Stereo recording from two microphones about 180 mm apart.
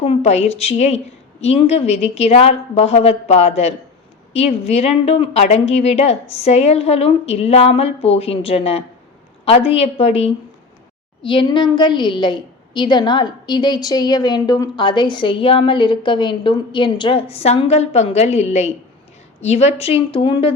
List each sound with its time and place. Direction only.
0.0 s a woman's voice: 35° left (ahead or behind)